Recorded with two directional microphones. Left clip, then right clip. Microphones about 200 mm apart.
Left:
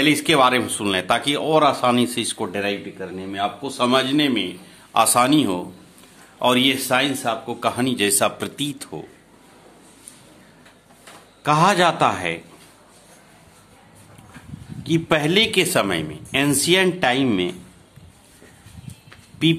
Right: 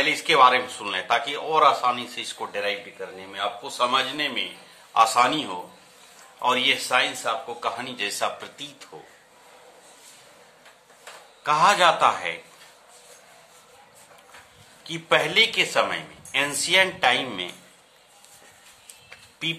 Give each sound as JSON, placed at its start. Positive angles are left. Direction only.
{"t": 0.0, "sound": "a man's voice", "side_deg": 50}
{"t": 11.4, "sound": "speech", "side_deg": 40}
{"t": 14.8, "sound": "speech", "side_deg": 35}
{"t": 19.4, "sound": "speech", "side_deg": 40}